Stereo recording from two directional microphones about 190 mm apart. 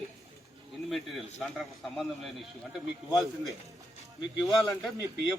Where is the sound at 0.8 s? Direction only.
Centre (ahead or behind).